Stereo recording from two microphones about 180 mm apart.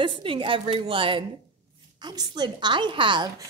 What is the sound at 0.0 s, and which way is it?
A woman's voice, 30° right (ahead or behind).